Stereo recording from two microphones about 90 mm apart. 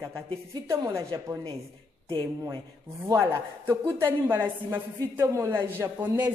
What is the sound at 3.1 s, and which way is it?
Speech, 30° right (ahead or behind).